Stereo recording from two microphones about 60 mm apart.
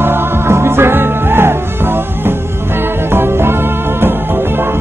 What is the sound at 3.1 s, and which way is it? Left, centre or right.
Music, right.